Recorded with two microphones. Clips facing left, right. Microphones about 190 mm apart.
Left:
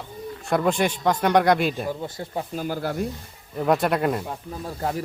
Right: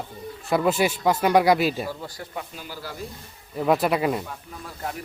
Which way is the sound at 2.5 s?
50° left (ahead or behind).